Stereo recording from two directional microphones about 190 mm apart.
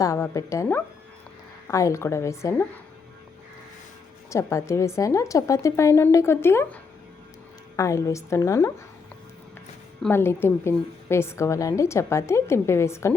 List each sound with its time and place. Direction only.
0.0 s a woman's voice: 15° left (ahead or behind)
4.3 s a woman's voice: 15° left (ahead or behind)
7.8 s a woman's voice: 15° left (ahead or behind)
10.0 s a woman's voice: 10° left (ahead or behind)